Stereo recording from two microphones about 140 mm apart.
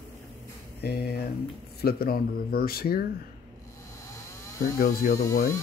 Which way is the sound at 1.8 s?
90° left.